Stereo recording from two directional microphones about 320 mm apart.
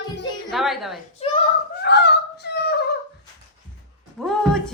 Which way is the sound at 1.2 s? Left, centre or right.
Centre.